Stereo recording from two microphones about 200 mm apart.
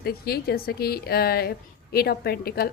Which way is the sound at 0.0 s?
50° left (ahead or behind).